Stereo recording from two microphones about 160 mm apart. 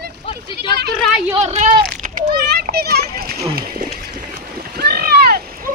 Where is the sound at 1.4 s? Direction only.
45° right (ahead or behind).